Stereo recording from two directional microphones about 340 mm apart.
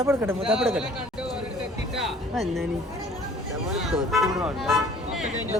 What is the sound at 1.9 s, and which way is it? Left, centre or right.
Music, centre.